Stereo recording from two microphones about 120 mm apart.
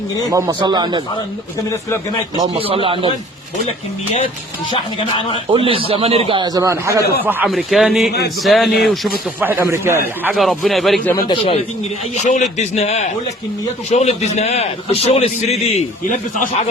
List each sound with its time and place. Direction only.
0.3 s a man's voice: 30° right (ahead or behind)
2.5 s a man's voice: 50° right (ahead or behind)
5.5 s a man's voice: 50° right (ahead or behind)
6.4 s a man's voice: 30° right (ahead or behind)
7.4 s a man's voice: centre (ahead or behind)
9.4 s a man's voice: 20° right (ahead or behind)
10.3 s a man's voice: centre (ahead or behind)
11.3 s speech: 50° left (ahead or behind)
12.2 s a man's voice: 75° left (ahead or behind)